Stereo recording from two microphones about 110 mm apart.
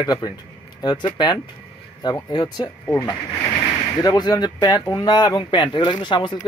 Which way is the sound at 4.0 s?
35° left (ahead or behind).